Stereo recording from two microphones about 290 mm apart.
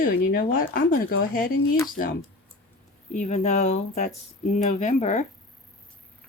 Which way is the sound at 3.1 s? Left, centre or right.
Left.